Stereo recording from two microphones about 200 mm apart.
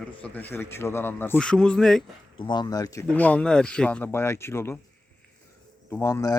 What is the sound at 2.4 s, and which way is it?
Speech, 20° left (ahead or behind).